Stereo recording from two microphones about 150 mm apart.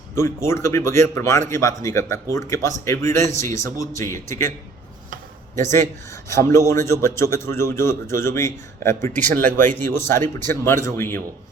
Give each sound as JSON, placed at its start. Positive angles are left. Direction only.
{"t": 0.2, "sound": "a man's voice", "side_deg": 15}
{"t": 5.5, "sound": "a man's voice", "side_deg": 15}